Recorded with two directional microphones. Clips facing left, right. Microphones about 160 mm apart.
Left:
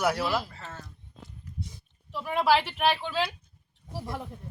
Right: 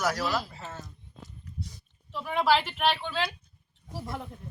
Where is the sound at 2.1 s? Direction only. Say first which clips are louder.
Left 1 dB; 5° left (ahead or behind).